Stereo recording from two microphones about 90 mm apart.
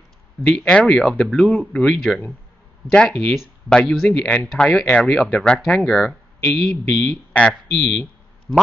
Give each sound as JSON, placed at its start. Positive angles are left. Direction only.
{"t": 0.4, "sound": "speech", "side_deg": 15}
{"t": 4.0, "sound": "speech", "side_deg": 15}
{"t": 7.8, "sound": "a sound", "side_deg": 15}